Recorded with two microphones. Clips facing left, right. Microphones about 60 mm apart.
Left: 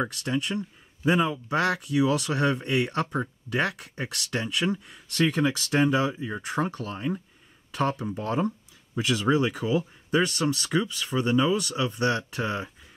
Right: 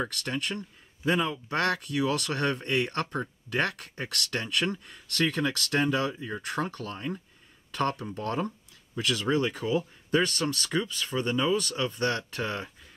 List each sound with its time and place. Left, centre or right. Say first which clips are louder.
0.0 s speech: left 4 dB; centre